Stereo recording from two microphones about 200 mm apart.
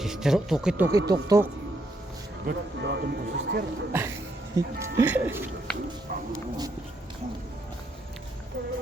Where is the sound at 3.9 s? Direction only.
10° right (ahead or behind).